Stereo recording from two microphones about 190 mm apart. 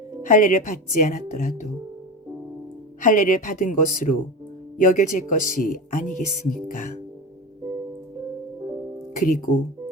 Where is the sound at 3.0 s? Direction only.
40° left (ahead or behind).